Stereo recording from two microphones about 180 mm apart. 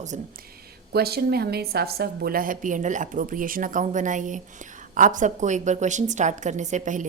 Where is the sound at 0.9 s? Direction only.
60° right (ahead or behind).